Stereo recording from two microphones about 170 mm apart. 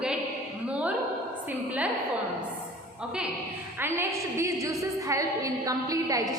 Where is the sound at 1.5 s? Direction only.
10° right (ahead or behind).